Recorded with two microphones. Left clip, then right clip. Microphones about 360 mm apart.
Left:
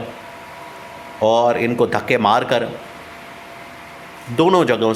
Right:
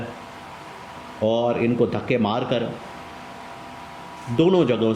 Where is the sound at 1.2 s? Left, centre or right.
Left.